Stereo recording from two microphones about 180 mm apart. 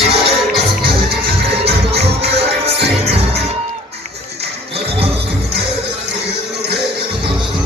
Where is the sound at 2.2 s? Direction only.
35° right (ahead or behind).